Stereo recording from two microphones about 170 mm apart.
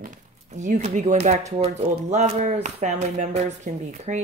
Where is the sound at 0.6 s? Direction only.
45° right (ahead or behind).